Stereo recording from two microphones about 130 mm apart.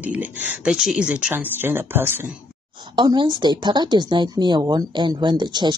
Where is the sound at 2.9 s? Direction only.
35° right (ahead or behind).